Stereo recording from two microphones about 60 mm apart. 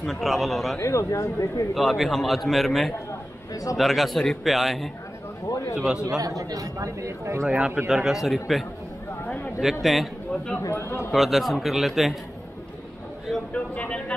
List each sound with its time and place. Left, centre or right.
0.0 s a man's voice: centre
0.7 s speech: left
1.7 s a man's voice: centre
5.5 s a man's voice: left
6.0 s a man's voice: right
7.4 s a man's voice: centre
10.8 s a man's voice: left
11.1 s a man's voice: centre
13.5 s speech: centre